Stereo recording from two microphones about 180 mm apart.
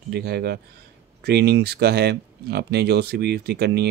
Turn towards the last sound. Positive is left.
turn(degrees=-65)  # may be behind; listen again after turning